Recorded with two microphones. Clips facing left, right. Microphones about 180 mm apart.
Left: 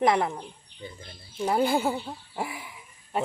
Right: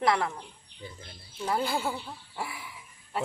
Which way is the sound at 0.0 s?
20° left (ahead or behind).